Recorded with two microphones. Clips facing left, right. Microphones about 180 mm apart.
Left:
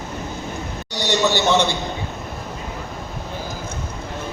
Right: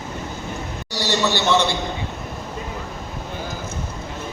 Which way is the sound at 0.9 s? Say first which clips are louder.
Left 2 dB; 15° left (ahead or behind).